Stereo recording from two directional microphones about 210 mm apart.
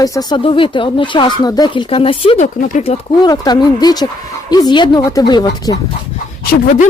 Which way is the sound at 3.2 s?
20° left (ahead or behind).